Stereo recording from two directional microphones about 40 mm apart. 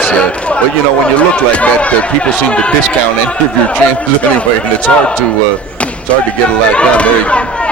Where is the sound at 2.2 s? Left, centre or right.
Left.